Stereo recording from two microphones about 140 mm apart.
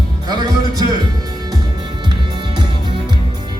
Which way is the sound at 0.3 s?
30° right (ahead or behind).